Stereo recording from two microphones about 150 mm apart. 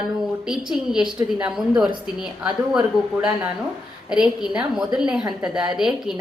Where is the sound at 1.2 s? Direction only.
5° right (ahead or behind).